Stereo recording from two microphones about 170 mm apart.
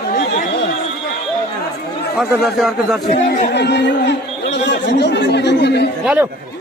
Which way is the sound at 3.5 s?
90° left.